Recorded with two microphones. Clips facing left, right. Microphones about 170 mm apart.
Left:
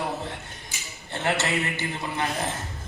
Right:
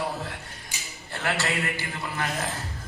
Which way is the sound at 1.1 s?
25° left (ahead or behind).